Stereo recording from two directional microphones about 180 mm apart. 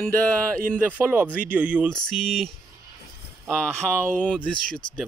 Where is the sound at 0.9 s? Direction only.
10° right (ahead or behind).